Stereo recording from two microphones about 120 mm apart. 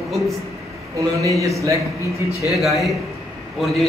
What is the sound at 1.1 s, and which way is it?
Speech, 25° right (ahead or behind).